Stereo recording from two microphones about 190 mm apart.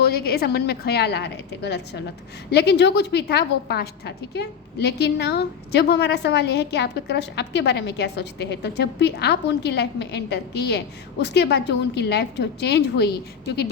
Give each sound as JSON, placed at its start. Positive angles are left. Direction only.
{"t": 0.0, "sound": "a woman's voice", "side_deg": 55}